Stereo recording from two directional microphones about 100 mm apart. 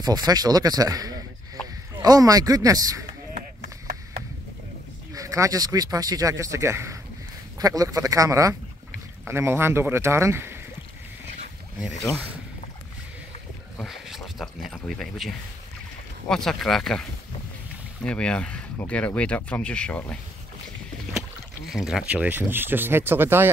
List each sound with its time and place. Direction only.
0.0 s speech: 40° right (ahead or behind)
5.1 s speech: 35° right (ahead or behind)
7.5 s speech: 40° right (ahead or behind)
9.2 s speech: 25° right (ahead or behind)
13.7 s a sound: 5° right (ahead or behind)
16.3 s speech: 5° left (ahead or behind)
21.6 s speech: 5° right (ahead or behind); by 23.5 s 20° right (ahead or behind)